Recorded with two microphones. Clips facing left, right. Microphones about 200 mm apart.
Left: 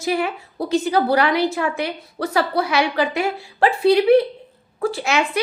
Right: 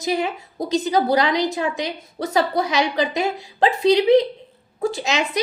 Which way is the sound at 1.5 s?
20° right (ahead or behind).